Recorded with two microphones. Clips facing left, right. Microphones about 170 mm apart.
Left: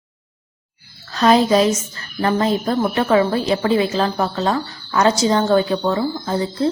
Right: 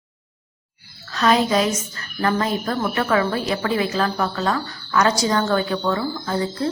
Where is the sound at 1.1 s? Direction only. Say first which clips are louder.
Left 4 dB; 30° left (ahead or behind).